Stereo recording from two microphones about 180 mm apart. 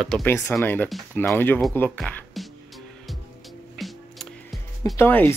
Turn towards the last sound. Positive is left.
turn(degrees=10)  # may be behind; listen again after turning